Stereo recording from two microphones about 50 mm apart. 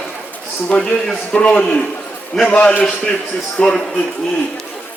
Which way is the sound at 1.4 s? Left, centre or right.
Left.